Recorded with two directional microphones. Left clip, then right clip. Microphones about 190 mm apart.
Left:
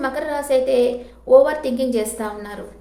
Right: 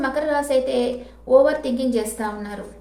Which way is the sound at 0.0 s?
20° left (ahead or behind).